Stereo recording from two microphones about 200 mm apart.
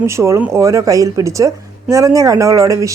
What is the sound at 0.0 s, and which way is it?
A woman's voice, 15° right (ahead or behind).